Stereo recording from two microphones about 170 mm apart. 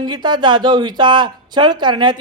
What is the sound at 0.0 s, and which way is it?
Speech, 25° right (ahead or behind).